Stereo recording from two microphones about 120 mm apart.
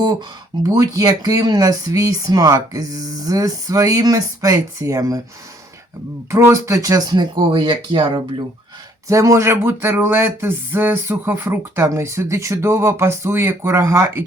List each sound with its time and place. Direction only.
0.7 s speech: 30° right (ahead or behind)
6.3 s speech: 20° right (ahead or behind); by 8.2 s 40° right (ahead or behind)
9.0 s a sound: 25° right (ahead or behind)